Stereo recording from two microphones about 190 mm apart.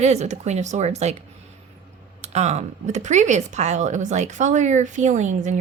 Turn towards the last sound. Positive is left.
turn(degrees=-40)  # may be behind; listen again after turning